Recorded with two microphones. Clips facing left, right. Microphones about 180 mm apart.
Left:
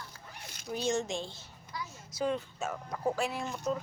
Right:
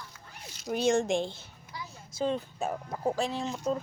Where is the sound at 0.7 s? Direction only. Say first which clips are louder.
Right 6 dB; 60° right (ahead or behind).